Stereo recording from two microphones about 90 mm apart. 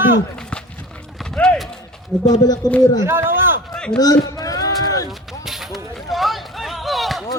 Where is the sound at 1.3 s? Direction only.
10° left (ahead or behind).